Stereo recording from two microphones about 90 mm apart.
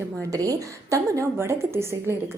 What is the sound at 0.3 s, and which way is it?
A woman's voice, 40° right (ahead or behind).